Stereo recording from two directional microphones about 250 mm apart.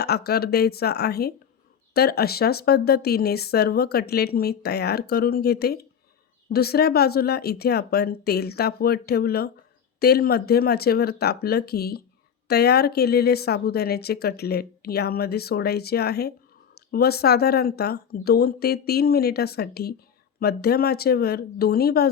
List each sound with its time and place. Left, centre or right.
0.0 s speech: left